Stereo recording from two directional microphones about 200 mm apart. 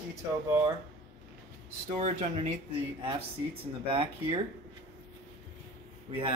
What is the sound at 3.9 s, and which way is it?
Speech, 25° right (ahead or behind).